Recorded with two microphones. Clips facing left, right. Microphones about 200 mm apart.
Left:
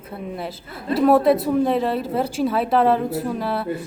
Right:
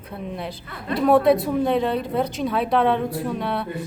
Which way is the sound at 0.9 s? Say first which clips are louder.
Left 1 dB; centre (ahead or behind).